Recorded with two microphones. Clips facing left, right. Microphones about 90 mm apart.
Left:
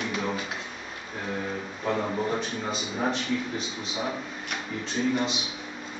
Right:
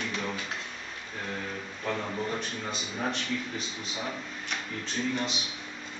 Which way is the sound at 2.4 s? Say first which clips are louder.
Left 4 dB; centre (ahead or behind).